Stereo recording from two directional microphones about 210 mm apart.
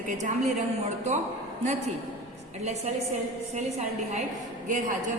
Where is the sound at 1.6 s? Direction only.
30° right (ahead or behind).